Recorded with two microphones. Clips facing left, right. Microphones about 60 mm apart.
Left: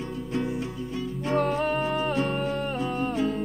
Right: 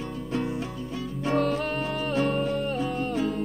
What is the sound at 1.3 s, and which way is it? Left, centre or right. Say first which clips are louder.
Music: left 1 dB; left.